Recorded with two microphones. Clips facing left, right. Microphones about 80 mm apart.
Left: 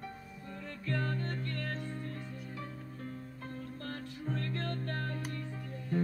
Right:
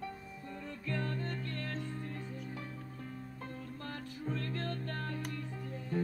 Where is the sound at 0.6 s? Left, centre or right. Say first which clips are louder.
Left 2 dB; left.